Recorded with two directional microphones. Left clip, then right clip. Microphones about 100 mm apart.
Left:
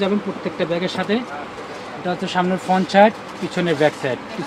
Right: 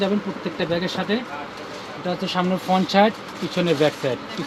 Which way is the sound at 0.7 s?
40° right (ahead or behind).